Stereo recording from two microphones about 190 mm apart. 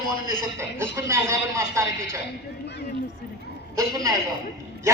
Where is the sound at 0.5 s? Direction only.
15° right (ahead or behind).